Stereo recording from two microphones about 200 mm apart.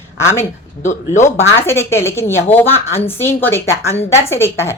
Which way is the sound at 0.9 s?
35° left (ahead or behind).